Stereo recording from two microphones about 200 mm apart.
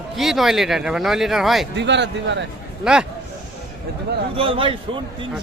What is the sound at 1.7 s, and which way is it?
Speech, 60° right (ahead or behind).